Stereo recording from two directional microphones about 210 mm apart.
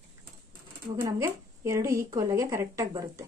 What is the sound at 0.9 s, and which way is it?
Speech, 15° right (ahead or behind).